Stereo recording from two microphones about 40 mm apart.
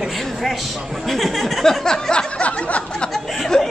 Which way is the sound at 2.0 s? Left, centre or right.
Left.